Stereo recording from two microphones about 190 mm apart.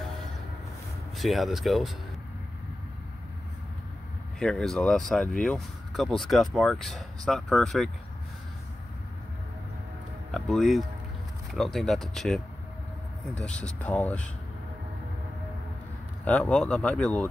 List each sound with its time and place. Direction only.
1.1 s speech: centre (ahead or behind)
4.4 s speech: 5° left (ahead or behind)
10.3 s speech: centre (ahead or behind)
16.3 s speech: 5° left (ahead or behind)